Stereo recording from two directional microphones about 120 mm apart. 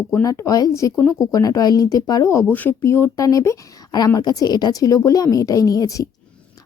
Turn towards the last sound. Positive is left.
turn(degrees=30)  # may be behind; listen again after turning